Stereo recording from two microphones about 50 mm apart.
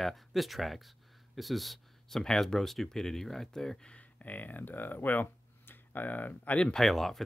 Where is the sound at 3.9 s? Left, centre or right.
Left.